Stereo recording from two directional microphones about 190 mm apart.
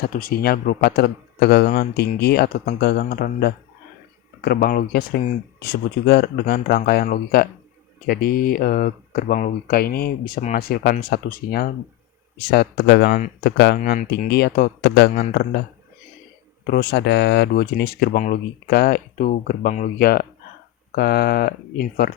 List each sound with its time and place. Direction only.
0.1 s speech: 45° left (ahead or behind)
16.6 s speech: 55° left (ahead or behind)